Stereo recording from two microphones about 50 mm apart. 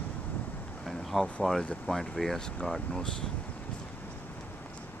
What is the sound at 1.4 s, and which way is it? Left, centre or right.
Speech, centre.